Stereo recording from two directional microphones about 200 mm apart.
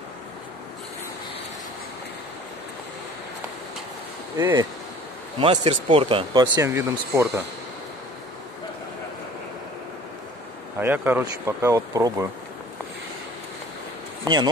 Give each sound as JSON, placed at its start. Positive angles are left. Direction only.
{"t": 4.4, "sound": "speech", "side_deg": -15}
{"t": 5.4, "sound": "speech", "side_deg": -30}
{"t": 10.8, "sound": "speech", "side_deg": -10}